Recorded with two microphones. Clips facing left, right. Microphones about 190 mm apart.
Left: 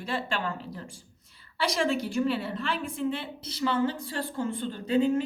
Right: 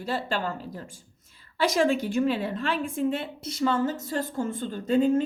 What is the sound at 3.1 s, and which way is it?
A woman's voice, 50° right (ahead or behind).